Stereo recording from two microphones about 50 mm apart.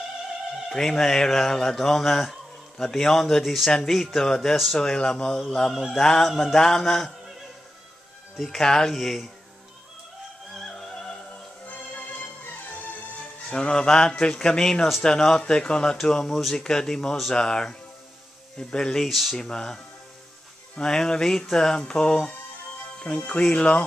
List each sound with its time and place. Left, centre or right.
0.7 s speech: centre
5.9 s music: centre
8.4 s speech: centre
10.5 s music: centre
13.6 s speech: centre
19.0 s music: centre
19.3 s speech: centre